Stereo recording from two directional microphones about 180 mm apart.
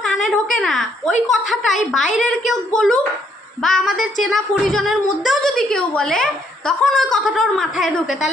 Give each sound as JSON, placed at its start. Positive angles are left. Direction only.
{"t": 0.0, "sound": "whimper", "side_deg": 0}
{"t": 0.6, "sound": "a woman's voice", "side_deg": 0}